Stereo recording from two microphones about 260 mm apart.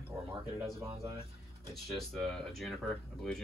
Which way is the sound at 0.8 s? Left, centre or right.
Right.